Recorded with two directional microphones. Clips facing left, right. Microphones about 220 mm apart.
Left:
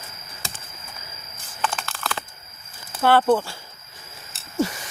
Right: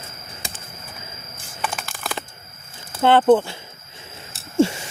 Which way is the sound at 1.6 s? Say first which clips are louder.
Left 1 dB; 10° right (ahead or behind).